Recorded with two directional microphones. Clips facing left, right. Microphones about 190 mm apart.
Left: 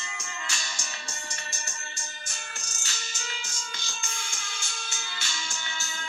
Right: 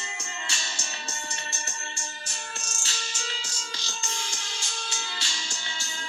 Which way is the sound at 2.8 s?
35° right (ahead or behind).